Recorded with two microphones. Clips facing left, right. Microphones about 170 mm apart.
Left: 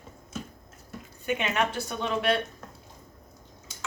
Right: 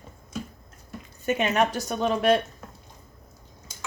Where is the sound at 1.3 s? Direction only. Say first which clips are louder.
Right 4 dB; 40° right (ahead or behind).